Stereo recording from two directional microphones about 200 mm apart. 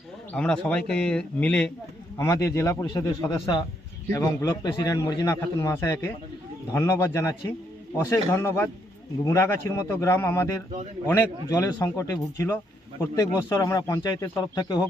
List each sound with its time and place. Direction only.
0.3 s a man's voice: 5° left (ahead or behind)